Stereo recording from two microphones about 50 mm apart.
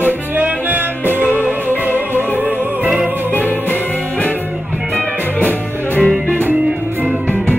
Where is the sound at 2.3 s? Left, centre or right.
Right.